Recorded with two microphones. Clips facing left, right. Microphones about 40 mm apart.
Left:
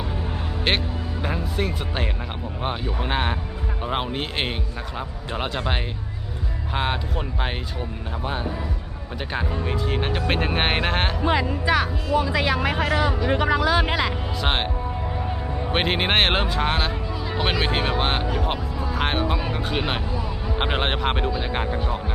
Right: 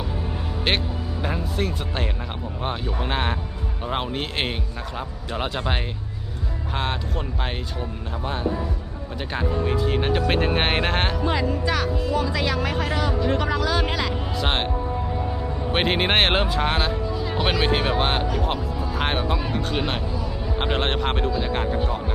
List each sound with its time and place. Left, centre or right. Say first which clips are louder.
0.7 s speech: even; centre
11.2 s speech: left 1 dB; centre
14.4 s speech: left 1 dB; centre
15.7 s speech: right 1 dB; centre